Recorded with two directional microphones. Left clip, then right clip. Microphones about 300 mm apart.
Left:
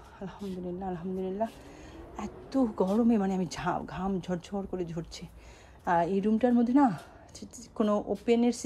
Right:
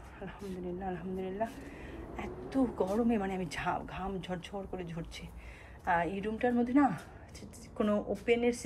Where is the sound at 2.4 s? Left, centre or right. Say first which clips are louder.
Left 4 dB; left.